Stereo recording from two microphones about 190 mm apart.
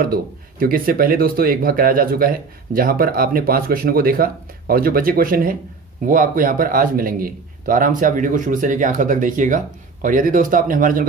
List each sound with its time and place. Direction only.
0.0 s speech: 50° right (ahead or behind)